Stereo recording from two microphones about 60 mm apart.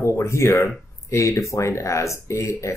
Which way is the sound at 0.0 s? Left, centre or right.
Left.